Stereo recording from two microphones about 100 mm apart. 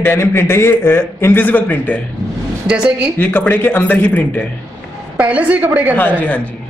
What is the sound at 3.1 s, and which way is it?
Speech, 20° left (ahead or behind).